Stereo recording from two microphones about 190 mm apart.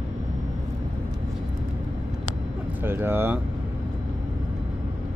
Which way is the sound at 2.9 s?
10° right (ahead or behind).